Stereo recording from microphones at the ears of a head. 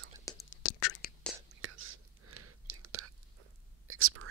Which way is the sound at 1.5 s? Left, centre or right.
Right.